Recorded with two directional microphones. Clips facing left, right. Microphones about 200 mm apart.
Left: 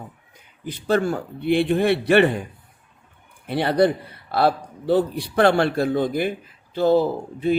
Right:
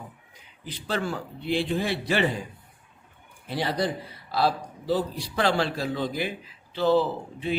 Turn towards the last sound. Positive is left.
turn(degrees=45)  # may be behind; listen again after turning